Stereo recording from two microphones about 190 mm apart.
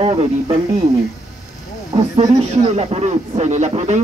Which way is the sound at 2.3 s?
35° right (ahead or behind).